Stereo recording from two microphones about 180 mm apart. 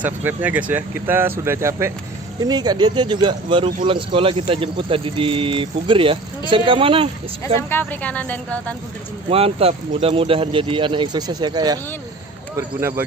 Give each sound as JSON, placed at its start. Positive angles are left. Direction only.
{"t": 0.0, "sound": "speech", "side_deg": -10}
{"t": 7.7, "sound": "speech", "side_deg": 10}
{"t": 9.3, "sound": "speech", "side_deg": -35}